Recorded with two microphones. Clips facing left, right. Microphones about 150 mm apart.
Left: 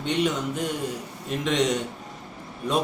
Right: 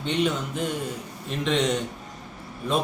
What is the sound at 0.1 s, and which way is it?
Speech, 5° left (ahead or behind).